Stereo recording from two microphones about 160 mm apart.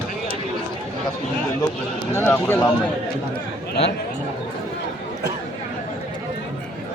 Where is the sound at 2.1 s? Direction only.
15° left (ahead or behind).